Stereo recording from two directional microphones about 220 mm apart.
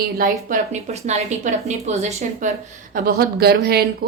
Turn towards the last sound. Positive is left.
turn(degrees=-45)  # may be behind; listen again after turning